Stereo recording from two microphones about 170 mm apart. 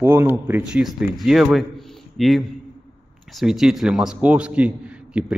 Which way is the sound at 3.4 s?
Centre (ahead or behind).